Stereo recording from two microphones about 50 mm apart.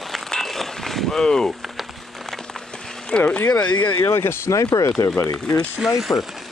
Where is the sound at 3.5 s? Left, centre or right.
Left.